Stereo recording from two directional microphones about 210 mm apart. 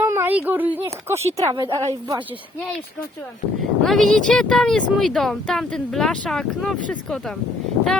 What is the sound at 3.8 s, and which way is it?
Speech, centre (ahead or behind).